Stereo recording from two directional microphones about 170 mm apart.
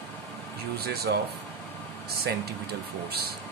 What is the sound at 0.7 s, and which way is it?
Speech, 70° right (ahead or behind).